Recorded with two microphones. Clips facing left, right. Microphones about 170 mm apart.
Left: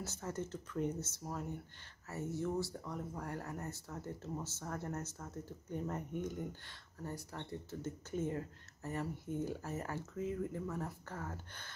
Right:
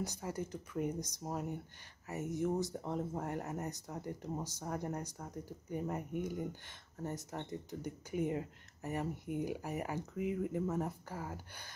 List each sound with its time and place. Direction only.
0.0 s speech: 10° right (ahead or behind)
7.0 s speech: 20° right (ahead or behind)